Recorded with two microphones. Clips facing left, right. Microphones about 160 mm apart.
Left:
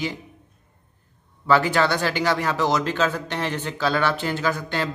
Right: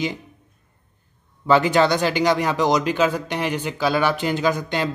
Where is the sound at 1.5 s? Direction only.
20° right (ahead or behind).